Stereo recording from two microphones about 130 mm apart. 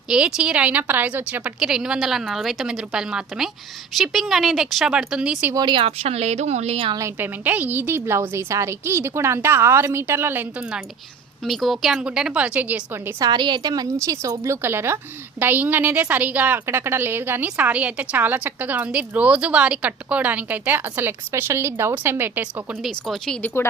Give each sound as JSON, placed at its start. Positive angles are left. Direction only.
{"t": 0.1, "sound": "a woman's voice", "side_deg": -5}
{"t": 5.5, "sound": "speech", "side_deg": -35}
{"t": 7.2, "sound": "a woman's voice", "side_deg": -15}
{"t": 13.1, "sound": "a woman's voice", "side_deg": -30}
{"t": 22.8, "sound": "a woman's voice", "side_deg": 0}